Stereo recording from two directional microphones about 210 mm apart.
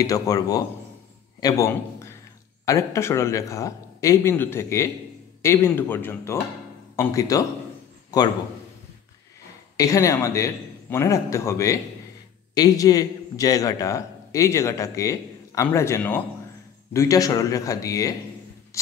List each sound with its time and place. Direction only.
0.0 s a man's voice: 15° left (ahead or behind)
9.8 s a man's voice: 15° left (ahead or behind)